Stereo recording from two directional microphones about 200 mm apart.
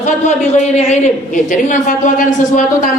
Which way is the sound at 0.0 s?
35° left (ahead or behind).